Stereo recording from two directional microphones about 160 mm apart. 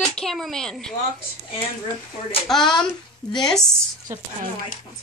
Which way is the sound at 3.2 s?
5° left (ahead or behind).